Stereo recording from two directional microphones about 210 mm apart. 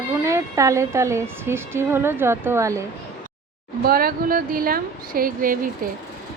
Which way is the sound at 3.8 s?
45° right (ahead or behind).